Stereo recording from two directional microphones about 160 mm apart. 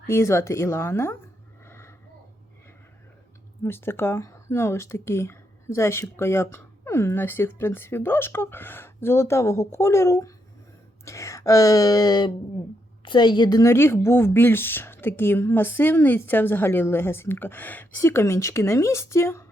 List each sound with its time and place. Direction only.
0.1 s speech: 15° left (ahead or behind)
1.6 s a sound: 15° left (ahead or behind)
3.6 s speech: 15° left (ahead or behind)